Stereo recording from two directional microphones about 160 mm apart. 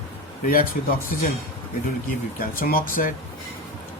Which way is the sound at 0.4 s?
60° left (ahead or behind).